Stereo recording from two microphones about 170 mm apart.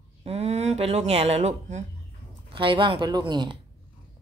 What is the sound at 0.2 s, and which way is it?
Speech, 40° right (ahead or behind).